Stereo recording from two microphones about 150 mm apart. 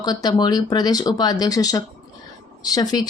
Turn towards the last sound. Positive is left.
turn(degrees=25)  # may be behind; listen again after turning